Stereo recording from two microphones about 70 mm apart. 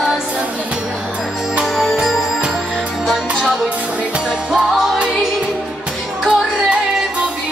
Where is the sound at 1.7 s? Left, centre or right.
Centre.